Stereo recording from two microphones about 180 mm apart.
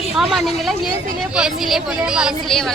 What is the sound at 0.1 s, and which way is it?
A woman's voice, centre (ahead or behind).